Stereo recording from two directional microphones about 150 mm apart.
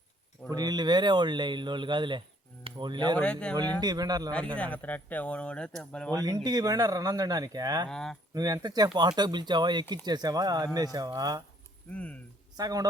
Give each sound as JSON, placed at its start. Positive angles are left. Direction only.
{"t": 0.5, "sound": "speech", "side_deg": -25}
{"t": 3.2, "sound": "speech", "side_deg": 5}
{"t": 3.8, "sound": "speech", "side_deg": -25}
{"t": 4.5, "sound": "speech", "side_deg": 10}
{"t": 6.1, "sound": "speech", "side_deg": -25}
{"t": 7.9, "sound": "speech", "side_deg": 5}
{"t": 8.3, "sound": "speech", "side_deg": -25}
{"t": 11.9, "sound": "speech", "side_deg": 10}
{"t": 12.5, "sound": "speech", "side_deg": -25}